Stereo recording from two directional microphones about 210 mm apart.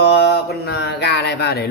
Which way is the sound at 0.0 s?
55° left (ahead or behind).